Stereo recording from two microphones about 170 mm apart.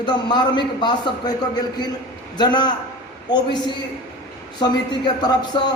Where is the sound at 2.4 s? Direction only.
25° left (ahead or behind).